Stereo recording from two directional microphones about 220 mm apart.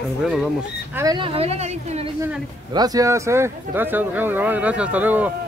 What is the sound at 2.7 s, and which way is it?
Speech, 15° right (ahead or behind).